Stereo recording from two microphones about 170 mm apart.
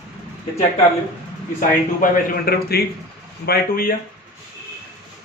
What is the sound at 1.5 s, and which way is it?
A man's voice, 60° left (ahead or behind).